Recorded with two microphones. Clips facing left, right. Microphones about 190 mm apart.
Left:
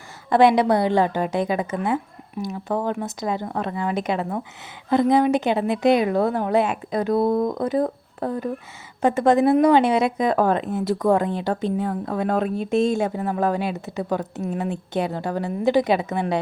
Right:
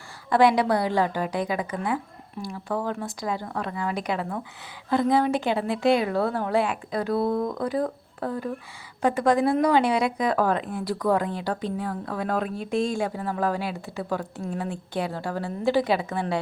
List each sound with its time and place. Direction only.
0.3 s speech: 25° left (ahead or behind)